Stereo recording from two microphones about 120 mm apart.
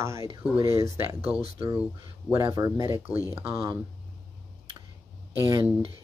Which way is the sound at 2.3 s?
30° right (ahead or behind).